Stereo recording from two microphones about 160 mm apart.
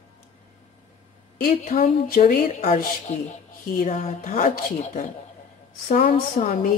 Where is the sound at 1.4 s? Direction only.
60° left (ahead or behind).